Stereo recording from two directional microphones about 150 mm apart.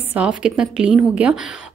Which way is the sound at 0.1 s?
5° right (ahead or behind).